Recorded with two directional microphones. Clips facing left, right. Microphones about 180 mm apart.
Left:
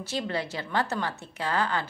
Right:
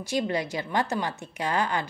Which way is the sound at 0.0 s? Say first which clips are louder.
Right 3 dB; 15° right (ahead or behind).